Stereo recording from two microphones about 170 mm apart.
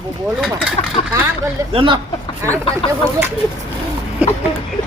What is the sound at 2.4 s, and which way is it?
Speech, 15° right (ahead or behind).